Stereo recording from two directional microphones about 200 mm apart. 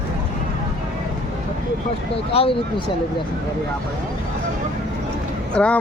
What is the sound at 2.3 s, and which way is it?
Speech, 25° left (ahead or behind).